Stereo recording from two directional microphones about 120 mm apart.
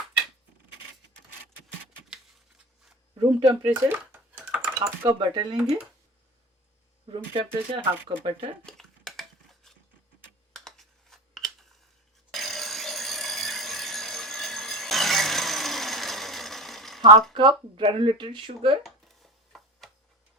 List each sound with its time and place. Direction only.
3.2 s speech: 35° right (ahead or behind)
3.6 s dishes: 15° right (ahead or behind)
4.8 s speech: 35° right (ahead or behind)
7.8 s speech: 45° right (ahead or behind)
8.6 s cutlery: 5° left (ahead or behind)
10.5 s computer keyboard: centre (ahead or behind)
12.3 s alarm clock: centre (ahead or behind)
17.3 s speech: 45° right (ahead or behind)
18.8 s a sound: centre (ahead or behind)